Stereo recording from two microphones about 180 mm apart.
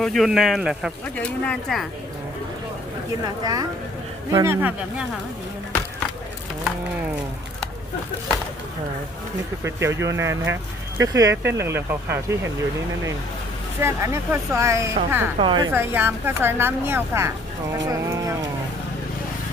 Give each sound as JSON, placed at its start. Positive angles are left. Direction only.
{"t": 0.0, "sound": "speech", "side_deg": 0}
{"t": 3.4, "sound": "speech", "side_deg": -20}
{"t": 9.6, "sound": "speech", "side_deg": -15}
{"t": 13.8, "sound": "speech", "side_deg": -15}
{"t": 15.4, "sound": "speech", "side_deg": -25}
{"t": 15.7, "sound": "speech", "side_deg": -10}